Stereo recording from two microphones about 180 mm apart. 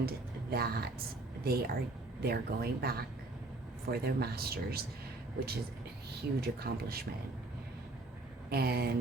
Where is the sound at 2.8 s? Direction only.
60° right (ahead or behind).